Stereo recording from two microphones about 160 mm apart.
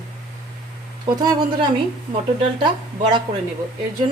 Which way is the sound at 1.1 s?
25° right (ahead or behind).